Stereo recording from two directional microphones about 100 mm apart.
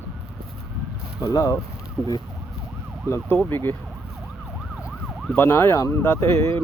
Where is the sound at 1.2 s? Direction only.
30° left (ahead or behind).